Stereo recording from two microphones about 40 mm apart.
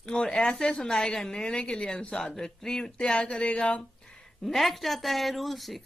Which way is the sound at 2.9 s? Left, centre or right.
Left.